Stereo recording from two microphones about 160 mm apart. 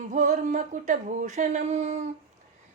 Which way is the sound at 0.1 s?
50° right (ahead or behind).